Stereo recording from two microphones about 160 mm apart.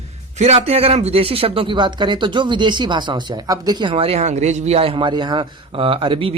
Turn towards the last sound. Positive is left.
turn(degrees=-35)  # may be behind; listen again after turning